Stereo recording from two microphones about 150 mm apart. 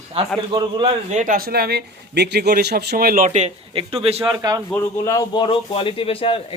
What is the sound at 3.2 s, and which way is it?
Speech, 50° right (ahead or behind).